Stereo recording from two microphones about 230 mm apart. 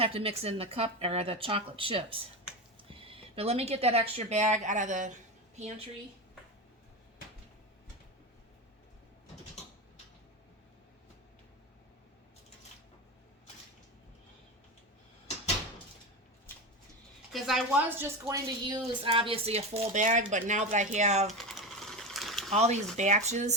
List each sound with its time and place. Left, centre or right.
0.0 s a woman's voice: right
17.3 s a woman's voice: centre; by 21.2 s right
21.2 s typing: centre
22.5 s a woman's voice: right